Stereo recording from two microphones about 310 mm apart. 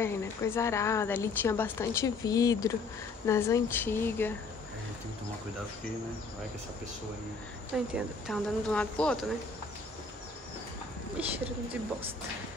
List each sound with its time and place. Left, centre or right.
0.0 s a woman's voice: centre
7.7 s speech: centre
11.2 s speech: centre